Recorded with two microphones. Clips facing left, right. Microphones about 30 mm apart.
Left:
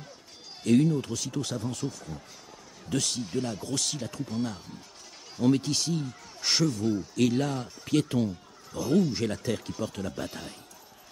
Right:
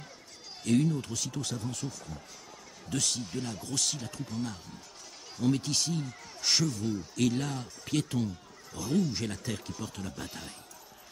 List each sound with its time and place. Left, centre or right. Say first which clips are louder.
0.7 s speech: left 4 dB; centre